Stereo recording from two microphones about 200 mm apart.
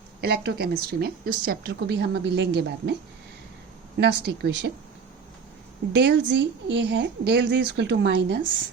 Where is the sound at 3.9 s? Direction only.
60° right (ahead or behind).